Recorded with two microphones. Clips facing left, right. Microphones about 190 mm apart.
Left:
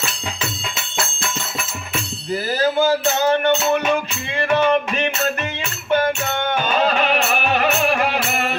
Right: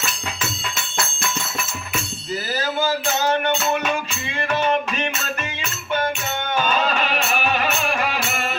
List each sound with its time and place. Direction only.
4.4 s music: 55° left (ahead or behind)